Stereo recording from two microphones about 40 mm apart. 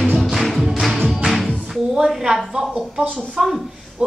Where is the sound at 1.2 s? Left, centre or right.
Centre.